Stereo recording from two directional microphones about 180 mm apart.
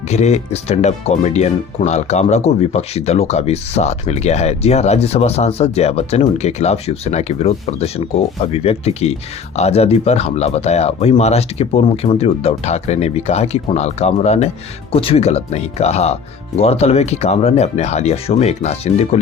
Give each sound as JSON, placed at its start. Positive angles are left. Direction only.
{"t": 0.1, "sound": "speech", "side_deg": 40}